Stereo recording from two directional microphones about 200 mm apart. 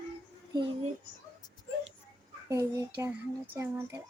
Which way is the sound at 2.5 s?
15° right (ahead or behind).